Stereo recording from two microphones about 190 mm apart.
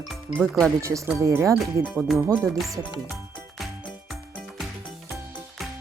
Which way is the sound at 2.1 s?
15° right (ahead or behind).